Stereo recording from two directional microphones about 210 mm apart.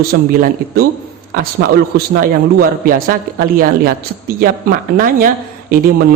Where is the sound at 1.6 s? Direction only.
50° right (ahead or behind).